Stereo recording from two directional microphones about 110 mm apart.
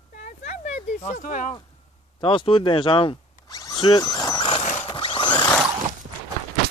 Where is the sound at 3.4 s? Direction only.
35° left (ahead or behind).